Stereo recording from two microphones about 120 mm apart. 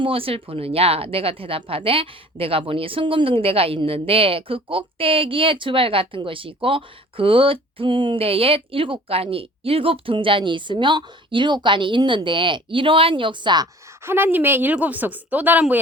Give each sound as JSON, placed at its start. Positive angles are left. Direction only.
{"t": 0.0, "sound": "speech", "side_deg": -50}
{"t": 14.0, "sound": "a woman's voice", "side_deg": -20}